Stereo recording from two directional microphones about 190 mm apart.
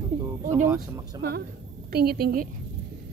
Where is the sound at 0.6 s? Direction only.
15° right (ahead or behind).